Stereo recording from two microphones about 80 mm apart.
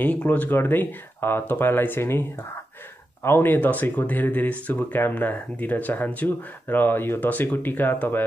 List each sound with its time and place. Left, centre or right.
0.0 s speech: centre
3.3 s speech: left